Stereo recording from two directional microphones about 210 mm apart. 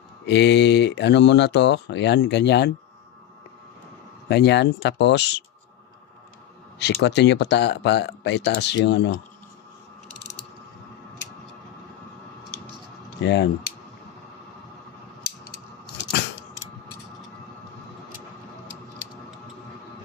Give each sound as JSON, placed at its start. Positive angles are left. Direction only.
{"t": 0.3, "sound": "speech", "side_deg": 55}
{"t": 4.3, "sound": "speech", "side_deg": 50}
{"t": 6.7, "sound": "speech", "side_deg": 55}
{"t": 13.2, "sound": "speech", "side_deg": 55}